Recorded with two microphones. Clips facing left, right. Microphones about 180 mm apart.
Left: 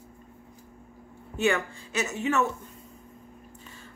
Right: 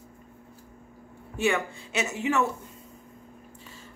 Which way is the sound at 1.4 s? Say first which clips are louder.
Even; 15° right (ahead or behind).